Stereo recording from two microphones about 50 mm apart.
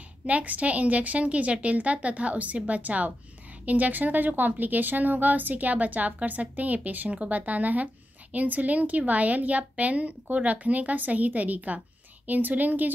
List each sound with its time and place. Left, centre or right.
0.3 s a woman's voice: right